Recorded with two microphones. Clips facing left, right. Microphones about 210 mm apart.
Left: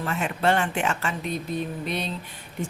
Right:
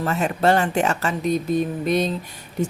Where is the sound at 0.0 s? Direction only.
40° right (ahead or behind).